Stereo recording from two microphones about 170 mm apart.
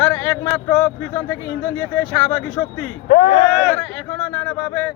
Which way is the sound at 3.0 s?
55° left (ahead or behind).